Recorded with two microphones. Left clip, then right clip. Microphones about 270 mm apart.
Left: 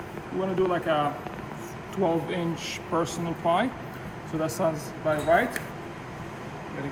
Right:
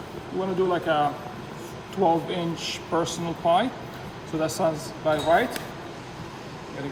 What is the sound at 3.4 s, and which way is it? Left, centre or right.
Speech, centre.